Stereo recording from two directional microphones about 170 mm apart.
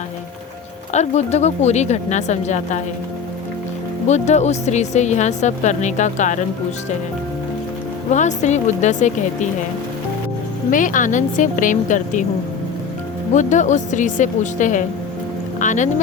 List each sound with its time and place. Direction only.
0.9 s a woman's voice: 40° left (ahead or behind)
4.0 s speech: 40° left (ahead or behind)
8.1 s speech: 45° left (ahead or behind)
10.7 s speech: 50° left (ahead or behind)
13.3 s speech: 45° left (ahead or behind)